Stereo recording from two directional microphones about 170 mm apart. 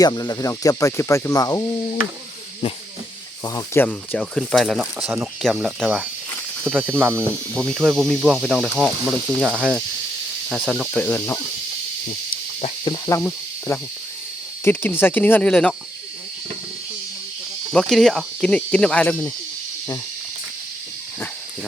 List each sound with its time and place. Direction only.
0.0 s cricket: 25° left (ahead or behind)
3.4 s cricket: 20° left (ahead or behind)
3.8 s speech: 5° left (ahead or behind)
6.8 s speech: 10° right (ahead or behind)
10.9 s speech: 10° left (ahead or behind)
12.8 s speech: 20° left (ahead or behind)
17.7 s speech: centre (ahead or behind)